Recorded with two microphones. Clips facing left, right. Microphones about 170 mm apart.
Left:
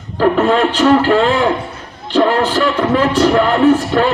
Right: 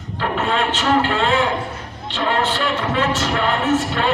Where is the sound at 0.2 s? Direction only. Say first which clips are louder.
Left 9 dB; 40° left (ahead or behind).